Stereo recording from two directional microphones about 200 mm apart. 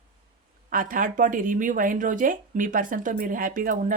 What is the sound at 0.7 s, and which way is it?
Speech, 45° right (ahead or behind).